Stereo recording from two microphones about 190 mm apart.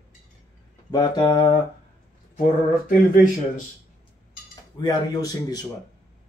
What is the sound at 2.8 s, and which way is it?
Speech, 40° left (ahead or behind).